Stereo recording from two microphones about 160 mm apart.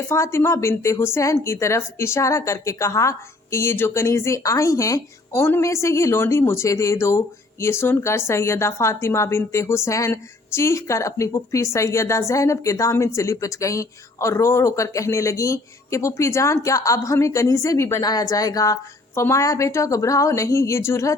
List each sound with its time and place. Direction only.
0.1 s a woman's voice: 15° left (ahead or behind)